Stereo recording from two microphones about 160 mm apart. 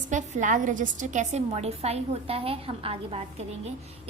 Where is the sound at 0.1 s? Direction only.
50° right (ahead or behind).